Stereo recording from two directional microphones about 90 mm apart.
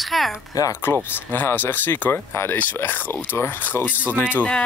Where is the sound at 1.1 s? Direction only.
20° left (ahead or behind).